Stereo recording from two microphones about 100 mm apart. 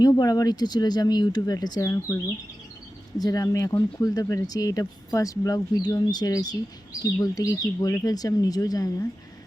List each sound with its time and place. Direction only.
0.0 s speech: 40° left (ahead or behind)
3.2 s speech: 40° left (ahead or behind)